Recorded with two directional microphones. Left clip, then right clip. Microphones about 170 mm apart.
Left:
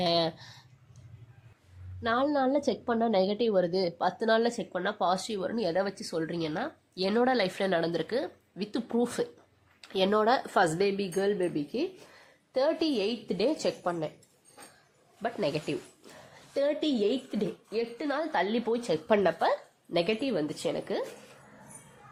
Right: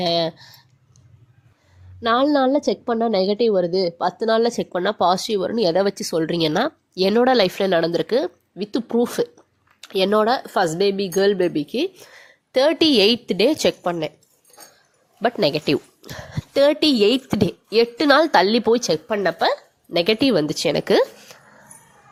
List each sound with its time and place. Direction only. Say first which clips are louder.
0.0 s a woman's voice: right 7 dB; 30° right (ahead or behind)
2.0 s a woman's voice: right 10 dB; 45° right (ahead or behind)
2.6 s a woman's voice: right 8 dB; 30° right (ahead or behind)
4.6 s speech: right 10 dB; 40° right (ahead or behind)
8.5 s speech: right 9 dB; 25° right (ahead or behind)
10.2 s a woman's voice: right 6 dB; 20° right (ahead or behind)
12.5 s speech: right 11 dB; 40° right (ahead or behind)
15.2 s speech: right 12 dB; 40° right (ahead or behind)
17.7 s a woman's voice: right 19 dB; 50° right (ahead or behind)
19.2 s speech: right 7 dB; 25° right (ahead or behind)
20.1 s speech: right 12 dB; 40° right (ahead or behind)